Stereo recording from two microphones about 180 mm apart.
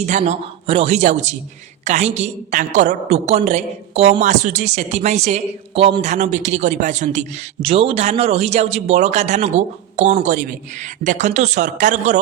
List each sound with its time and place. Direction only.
0.0 s a woman's voice: 40° right (ahead or behind)